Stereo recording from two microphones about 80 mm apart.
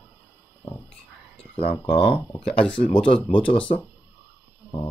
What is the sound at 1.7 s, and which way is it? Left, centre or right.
Speech, left.